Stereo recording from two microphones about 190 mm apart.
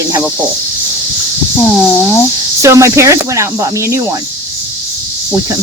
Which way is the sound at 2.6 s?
15° right (ahead or behind).